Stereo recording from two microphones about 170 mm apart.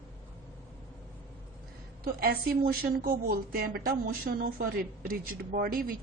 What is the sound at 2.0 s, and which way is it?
A woman's voice, 65° right (ahead or behind).